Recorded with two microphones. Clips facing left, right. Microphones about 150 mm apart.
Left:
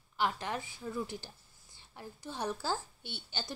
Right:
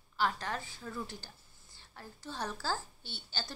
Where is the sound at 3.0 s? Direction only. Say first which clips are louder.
Left 3 dB; 55° left (ahead or behind).